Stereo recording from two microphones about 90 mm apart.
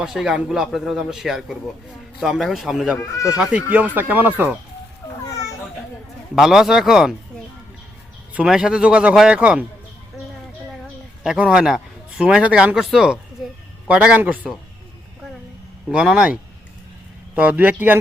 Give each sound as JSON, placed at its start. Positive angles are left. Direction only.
{"t": 0.0, "sound": "a man's voice", "side_deg": -5}
{"t": 3.0, "sound": "speech", "side_deg": 35}
{"t": 3.3, "sound": "speech", "side_deg": -15}
{"t": 6.3, "sound": "a man's voice", "side_deg": -5}
{"t": 8.3, "sound": "a man's voice", "side_deg": -10}
{"t": 11.2, "sound": "speech", "side_deg": -10}
{"t": 12.7, "sound": "a man's voice", "side_deg": -5}
{"t": 15.9, "sound": "a man's voice", "side_deg": -10}